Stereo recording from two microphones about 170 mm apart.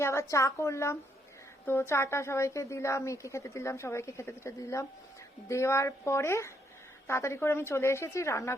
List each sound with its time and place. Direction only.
0.0 s a woman's voice: 15° left (ahead or behind)